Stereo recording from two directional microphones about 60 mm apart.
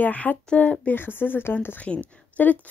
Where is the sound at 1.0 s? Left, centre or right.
Left.